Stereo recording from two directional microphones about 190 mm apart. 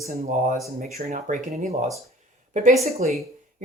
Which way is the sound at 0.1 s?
45° right (ahead or behind).